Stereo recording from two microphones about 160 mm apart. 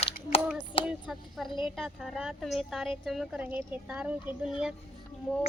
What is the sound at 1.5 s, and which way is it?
Child singing, 30° left (ahead or behind).